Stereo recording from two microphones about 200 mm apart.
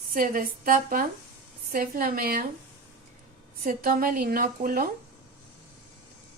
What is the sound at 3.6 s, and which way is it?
Speech, 45° right (ahead or behind).